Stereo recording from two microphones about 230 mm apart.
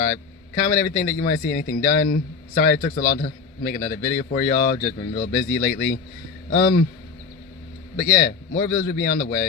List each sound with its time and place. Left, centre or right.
0.6 s a man's voice: left
8.1 s a man's voice: left